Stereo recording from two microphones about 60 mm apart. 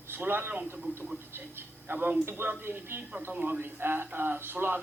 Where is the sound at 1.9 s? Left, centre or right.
Right.